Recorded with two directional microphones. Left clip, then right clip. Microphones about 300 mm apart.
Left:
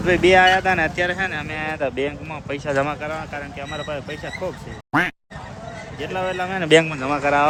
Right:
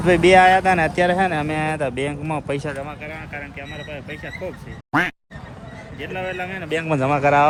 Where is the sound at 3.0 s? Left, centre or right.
Centre.